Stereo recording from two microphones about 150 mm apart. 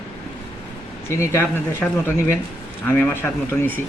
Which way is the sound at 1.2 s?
15° left (ahead or behind).